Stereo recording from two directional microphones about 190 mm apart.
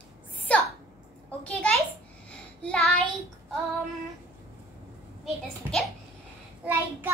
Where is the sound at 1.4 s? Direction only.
5° left (ahead or behind).